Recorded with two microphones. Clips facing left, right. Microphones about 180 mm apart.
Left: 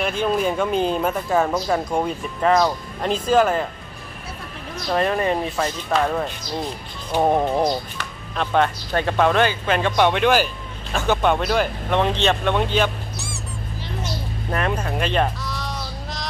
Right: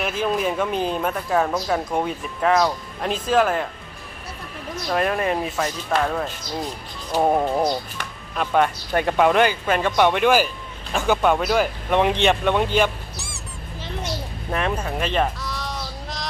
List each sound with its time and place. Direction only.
0.0 s speech: 5° right (ahead or behind)
4.9 s speech: centre (ahead or behind)
14.5 s a sound: centre (ahead or behind)